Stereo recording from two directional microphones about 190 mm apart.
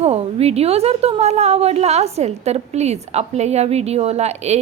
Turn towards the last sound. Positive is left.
turn(degrees=-35)  # may be behind; listen again after turning